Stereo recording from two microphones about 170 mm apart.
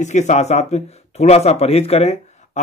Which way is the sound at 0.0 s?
45° left (ahead or behind).